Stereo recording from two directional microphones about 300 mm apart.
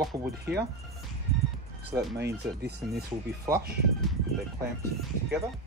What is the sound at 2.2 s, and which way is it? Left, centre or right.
Speech, right.